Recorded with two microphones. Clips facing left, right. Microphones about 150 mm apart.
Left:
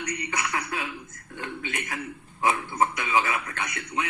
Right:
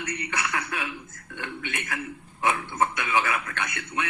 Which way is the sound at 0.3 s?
30° left (ahead or behind).